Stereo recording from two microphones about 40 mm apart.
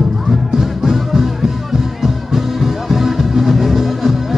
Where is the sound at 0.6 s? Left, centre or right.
Centre.